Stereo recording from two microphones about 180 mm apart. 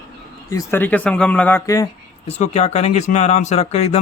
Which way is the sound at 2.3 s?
40° left (ahead or behind).